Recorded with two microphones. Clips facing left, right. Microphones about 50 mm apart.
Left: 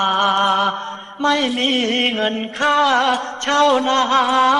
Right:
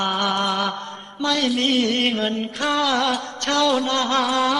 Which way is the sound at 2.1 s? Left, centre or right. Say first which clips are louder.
Left 3 dB; left.